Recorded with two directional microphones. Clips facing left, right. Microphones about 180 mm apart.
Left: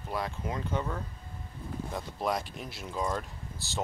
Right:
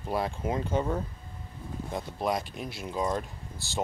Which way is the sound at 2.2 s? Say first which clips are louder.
Right 2 dB; 5° right (ahead or behind).